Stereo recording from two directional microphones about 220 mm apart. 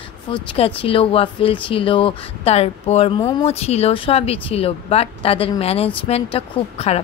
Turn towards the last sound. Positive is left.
turn(degrees=30)  # may be behind; listen again after turning